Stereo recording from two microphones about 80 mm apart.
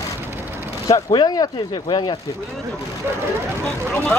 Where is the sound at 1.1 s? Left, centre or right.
Left.